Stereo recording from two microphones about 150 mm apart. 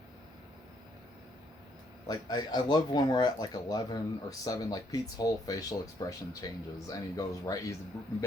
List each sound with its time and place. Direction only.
2.0 s speech: 25° left (ahead or behind)